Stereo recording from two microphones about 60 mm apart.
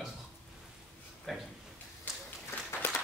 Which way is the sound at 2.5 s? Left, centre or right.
Left.